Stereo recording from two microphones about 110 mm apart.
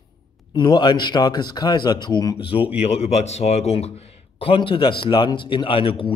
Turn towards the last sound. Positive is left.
turn(degrees=55)  # may be behind; listen again after turning